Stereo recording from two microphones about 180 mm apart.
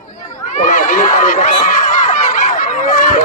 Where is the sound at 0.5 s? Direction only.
45° left (ahead or behind).